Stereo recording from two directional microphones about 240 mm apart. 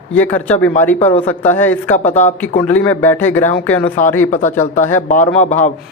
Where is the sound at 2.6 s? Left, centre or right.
Centre.